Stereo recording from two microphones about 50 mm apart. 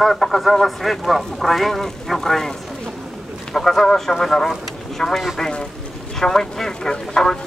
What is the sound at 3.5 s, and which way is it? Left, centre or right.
Speech, centre.